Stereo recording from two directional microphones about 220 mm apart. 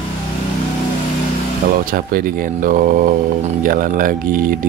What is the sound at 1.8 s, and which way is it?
Speech, 40° right (ahead or behind).